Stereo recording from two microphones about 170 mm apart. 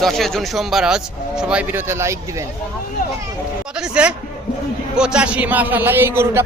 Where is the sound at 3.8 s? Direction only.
5° right (ahead or behind).